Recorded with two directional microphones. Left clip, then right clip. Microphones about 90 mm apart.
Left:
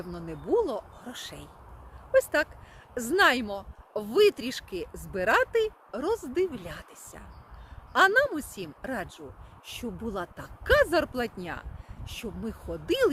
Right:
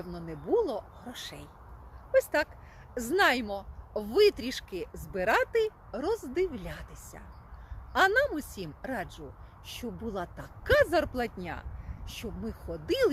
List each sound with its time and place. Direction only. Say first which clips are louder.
0.0 s a woman's voice: left 2 dB; 40° left (ahead or behind)